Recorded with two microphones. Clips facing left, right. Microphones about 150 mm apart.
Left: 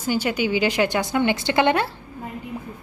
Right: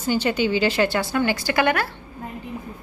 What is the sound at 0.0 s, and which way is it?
Speech, 10° left (ahead or behind).